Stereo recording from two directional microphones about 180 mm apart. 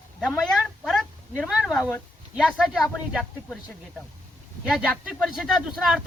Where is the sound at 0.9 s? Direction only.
Centre (ahead or behind).